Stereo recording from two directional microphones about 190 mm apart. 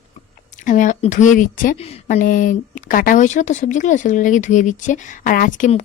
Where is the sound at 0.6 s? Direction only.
40° left (ahead or behind).